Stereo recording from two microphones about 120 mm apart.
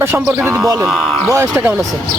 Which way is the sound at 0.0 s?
15° right (ahead or behind).